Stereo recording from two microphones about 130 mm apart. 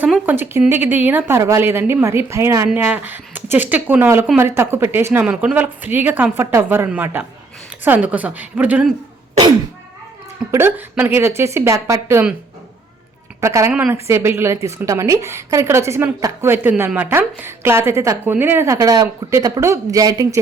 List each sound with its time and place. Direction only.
0.3 s a woman's voice: 15° right (ahead or behind)
10.5 s a woman's voice: 15° right (ahead or behind)
13.4 s a woman's voice: 20° right (ahead or behind)